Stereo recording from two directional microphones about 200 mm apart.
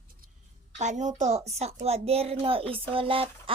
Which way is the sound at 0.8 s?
35° right (ahead or behind).